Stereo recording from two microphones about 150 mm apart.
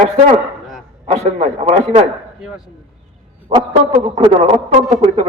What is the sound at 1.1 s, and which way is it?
Speech, 45° right (ahead or behind).